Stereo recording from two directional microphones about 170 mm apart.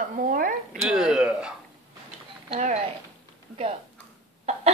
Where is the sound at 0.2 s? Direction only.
55° right (ahead or behind).